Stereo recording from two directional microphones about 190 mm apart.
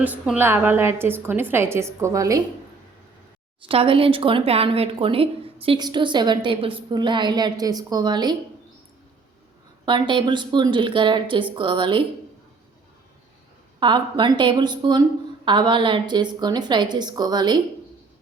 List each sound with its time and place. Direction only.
0.0 s a woman's voice: 10° right (ahead or behind)
3.7 s a woman's voice: 30° right (ahead or behind)
9.8 s a woman's voice: 25° right (ahead or behind)
13.7 s a woman's voice: 25° right (ahead or behind)